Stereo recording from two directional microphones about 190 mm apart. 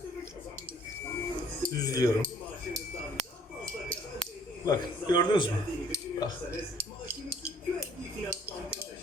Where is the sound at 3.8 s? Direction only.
5° left (ahead or behind).